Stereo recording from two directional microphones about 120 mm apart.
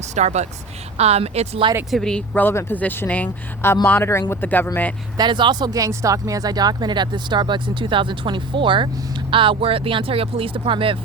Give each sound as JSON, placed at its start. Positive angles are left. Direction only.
{"t": 0.1, "sound": "a woman's voice", "side_deg": -70}
{"t": 1.9, "sound": "speech", "side_deg": 5}
{"t": 5.1, "sound": "speech", "side_deg": -40}